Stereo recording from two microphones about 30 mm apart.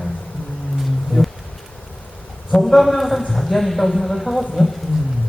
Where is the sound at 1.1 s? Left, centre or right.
Left.